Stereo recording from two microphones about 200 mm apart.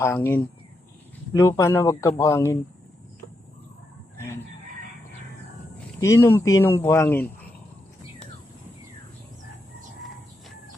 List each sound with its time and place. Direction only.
0.0 s speech: 10° left (ahead or behind)
6.0 s speech: 15° left (ahead or behind)